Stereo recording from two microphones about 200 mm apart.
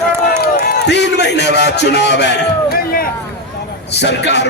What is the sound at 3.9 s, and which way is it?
Music, 60° left (ahead or behind).